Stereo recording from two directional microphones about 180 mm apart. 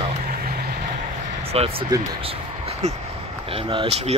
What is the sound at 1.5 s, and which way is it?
Speech, 35° right (ahead or behind).